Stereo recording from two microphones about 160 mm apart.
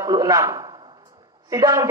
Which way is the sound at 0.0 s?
25° right (ahead or behind).